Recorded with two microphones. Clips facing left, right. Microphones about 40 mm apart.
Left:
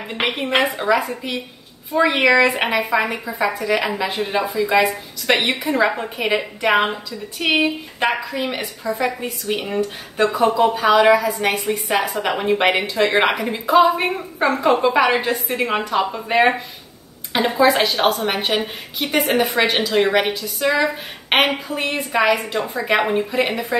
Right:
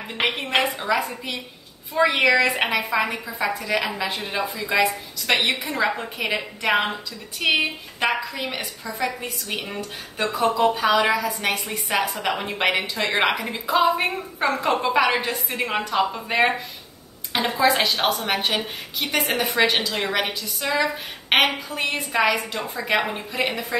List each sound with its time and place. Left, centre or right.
0.2 s a woman's voice: centre
17.6 s a woman's voice: centre
19.2 s a woman's voice: left
19.5 s a woman's voice: centre